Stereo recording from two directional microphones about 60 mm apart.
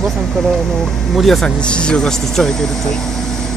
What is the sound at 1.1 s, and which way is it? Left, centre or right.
Speech, centre.